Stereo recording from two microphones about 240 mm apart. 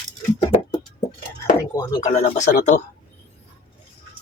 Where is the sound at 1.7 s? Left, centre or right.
Left.